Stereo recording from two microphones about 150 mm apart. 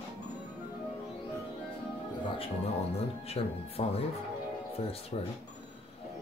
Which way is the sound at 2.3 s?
40° left (ahead or behind).